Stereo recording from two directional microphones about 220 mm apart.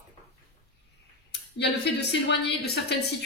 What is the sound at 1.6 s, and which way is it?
A woman's voice, 50° left (ahead or behind).